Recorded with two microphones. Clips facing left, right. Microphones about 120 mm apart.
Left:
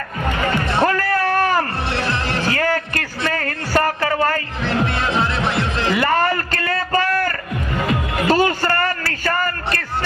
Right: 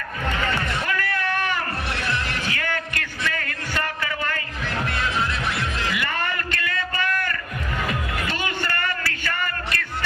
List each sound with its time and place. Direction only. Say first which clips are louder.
0.3 s music: left 5 dB; 40° left (ahead or behind)
7.9 s music: left 9 dB; 25° left (ahead or behind)
8.3 s a sound: left 15 dB; 40° left (ahead or behind)